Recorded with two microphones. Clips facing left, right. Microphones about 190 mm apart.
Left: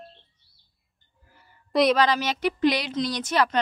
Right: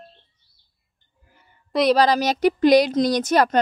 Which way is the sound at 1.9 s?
40° right (ahead or behind).